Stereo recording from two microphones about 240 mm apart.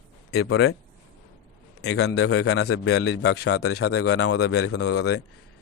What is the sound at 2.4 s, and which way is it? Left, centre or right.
Speech, left.